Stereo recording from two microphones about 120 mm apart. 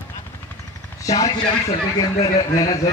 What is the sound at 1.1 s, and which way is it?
Speech, 30° left (ahead or behind).